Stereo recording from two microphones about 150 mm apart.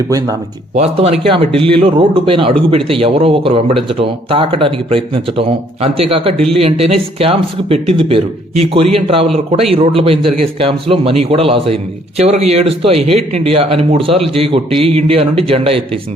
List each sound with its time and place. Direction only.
0.8 s a man's voice: 45° right (ahead or behind)